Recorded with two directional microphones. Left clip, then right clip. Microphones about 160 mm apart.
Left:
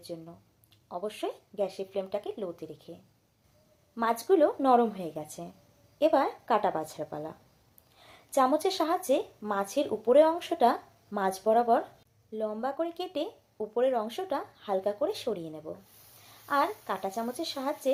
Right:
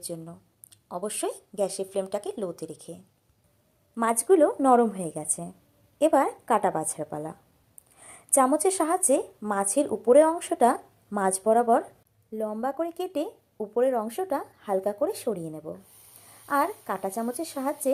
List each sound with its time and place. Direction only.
0.0 s a woman's voice: 35° right (ahead or behind)
7.9 s a sound: 30° right (ahead or behind)
8.6 s speech: 30° right (ahead or behind)